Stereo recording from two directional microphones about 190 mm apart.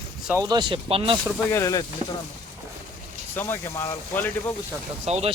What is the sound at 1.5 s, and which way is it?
Speech, 15° left (ahead or behind).